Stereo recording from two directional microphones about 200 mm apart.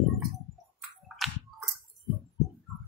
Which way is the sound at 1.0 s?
Centre (ahead or behind).